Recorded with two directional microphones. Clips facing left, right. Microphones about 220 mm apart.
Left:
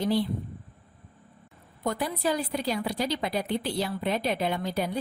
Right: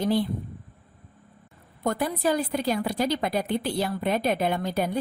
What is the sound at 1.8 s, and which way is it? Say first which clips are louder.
A woman's voice: right 3 dB; 50° right (ahead or behind).